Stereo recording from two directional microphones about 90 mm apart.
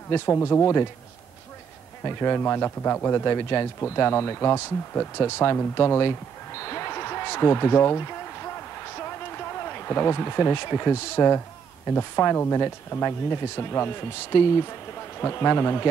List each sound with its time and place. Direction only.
0.1 s speech: 25° left (ahead or behind)
2.0 s speech: 25° left (ahead or behind)